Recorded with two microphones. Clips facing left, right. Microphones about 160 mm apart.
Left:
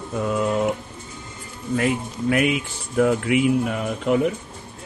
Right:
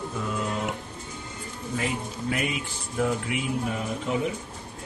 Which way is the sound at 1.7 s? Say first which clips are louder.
Left 7 dB; 60° left (ahead or behind).